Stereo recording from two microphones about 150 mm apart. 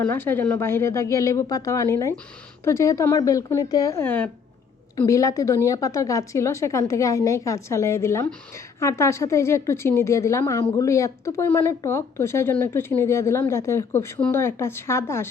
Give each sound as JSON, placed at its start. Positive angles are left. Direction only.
{"t": 0.1, "sound": "speech", "side_deg": 15}